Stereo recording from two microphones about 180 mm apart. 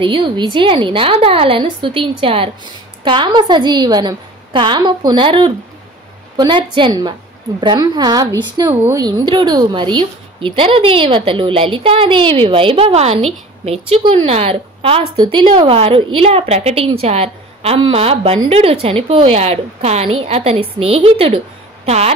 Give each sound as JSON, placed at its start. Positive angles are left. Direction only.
{"t": 0.0, "sound": "a woman's voice", "side_deg": -30}